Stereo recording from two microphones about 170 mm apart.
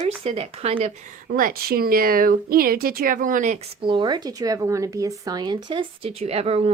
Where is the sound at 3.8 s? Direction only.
30° right (ahead or behind).